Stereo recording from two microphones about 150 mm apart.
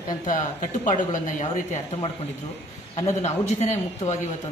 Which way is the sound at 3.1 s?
50° left (ahead or behind).